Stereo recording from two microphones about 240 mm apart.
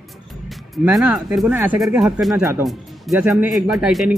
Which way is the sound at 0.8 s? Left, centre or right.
Centre.